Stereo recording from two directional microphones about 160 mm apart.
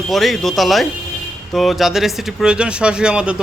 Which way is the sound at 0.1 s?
Centre (ahead or behind).